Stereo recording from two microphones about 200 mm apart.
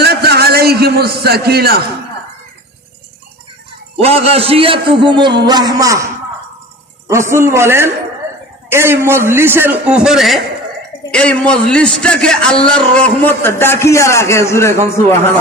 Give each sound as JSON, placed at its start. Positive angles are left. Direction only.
{"t": 0.0, "sound": "a sound", "side_deg": -55}
{"t": 4.0, "sound": "a man's voice", "side_deg": -30}
{"t": 7.1, "sound": "a man's voice", "side_deg": -15}